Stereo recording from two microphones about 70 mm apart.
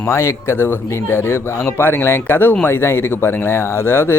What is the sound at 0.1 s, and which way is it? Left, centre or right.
Speech, left.